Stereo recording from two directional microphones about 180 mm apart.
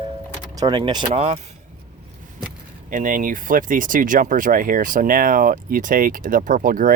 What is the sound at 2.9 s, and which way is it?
Speech, 50° right (ahead or behind).